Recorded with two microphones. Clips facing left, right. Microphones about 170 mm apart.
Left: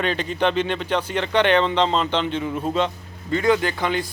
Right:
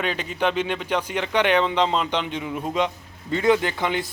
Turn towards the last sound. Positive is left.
turn(degrees=-20)  # may be behind; listen again after turning